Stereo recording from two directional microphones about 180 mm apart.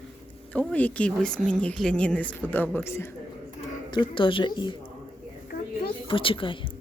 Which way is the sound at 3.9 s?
25° left (ahead or behind).